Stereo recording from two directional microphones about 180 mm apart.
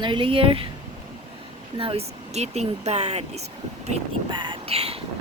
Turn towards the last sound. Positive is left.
turn(degrees=-35)  # may be behind; listen again after turning